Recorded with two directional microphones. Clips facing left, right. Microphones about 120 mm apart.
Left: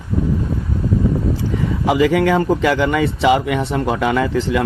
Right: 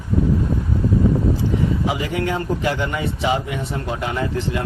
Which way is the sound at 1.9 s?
90° left.